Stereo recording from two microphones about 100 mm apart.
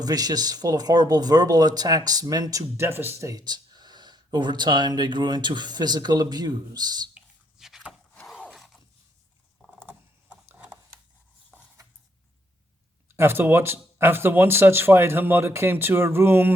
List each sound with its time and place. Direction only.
0.0 s speech: 40° right (ahead or behind)
3.4 s speech: 45° right (ahead or behind)
7.6 s vehicle: 5° right (ahead or behind)
8.3 s a sound: 10° right (ahead or behind)
9.8 s a sound: 20° right (ahead or behind)
13.1 s speech: 25° right (ahead or behind)